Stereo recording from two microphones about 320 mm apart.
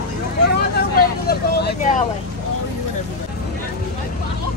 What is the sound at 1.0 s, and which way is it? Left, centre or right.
Vehicle, left.